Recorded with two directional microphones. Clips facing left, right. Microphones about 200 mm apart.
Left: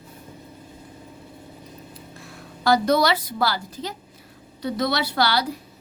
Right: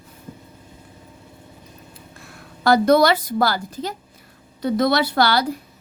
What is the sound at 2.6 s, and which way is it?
A woman's voice, 55° right (ahead or behind).